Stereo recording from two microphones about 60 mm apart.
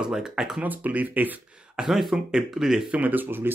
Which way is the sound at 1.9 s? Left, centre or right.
Centre.